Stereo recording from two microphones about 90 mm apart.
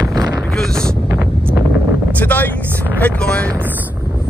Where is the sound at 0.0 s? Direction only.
40° right (ahead or behind).